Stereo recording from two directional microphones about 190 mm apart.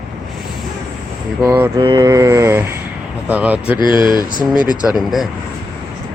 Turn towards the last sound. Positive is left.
turn(degrees=0)  # may be behind; listen again after turning